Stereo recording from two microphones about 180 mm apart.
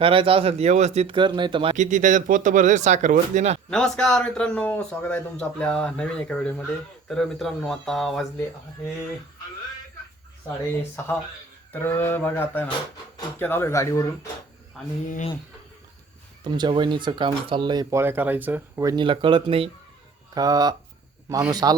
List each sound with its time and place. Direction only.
0.0 s speech: 30° right (ahead or behind)
1.7 s speech: 45° right (ahead or behind)
3.7 s a man's voice: 5° left (ahead or behind)
11.7 s a sound: 10° left (ahead or behind)
16.4 s speech: 25° right (ahead or behind)
20.3 s speech: 20° right (ahead or behind)